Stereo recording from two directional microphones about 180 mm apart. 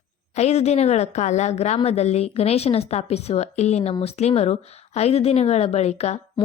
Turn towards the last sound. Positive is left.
turn(degrees=35)  # may be behind; listen again after turning